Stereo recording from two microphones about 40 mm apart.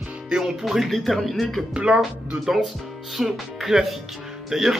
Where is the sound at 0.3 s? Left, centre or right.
Centre.